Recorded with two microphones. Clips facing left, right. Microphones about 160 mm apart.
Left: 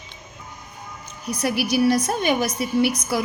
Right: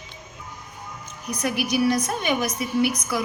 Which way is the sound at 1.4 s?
30° left (ahead or behind).